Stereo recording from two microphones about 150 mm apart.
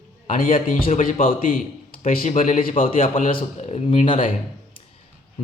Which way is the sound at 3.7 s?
40° left (ahead or behind).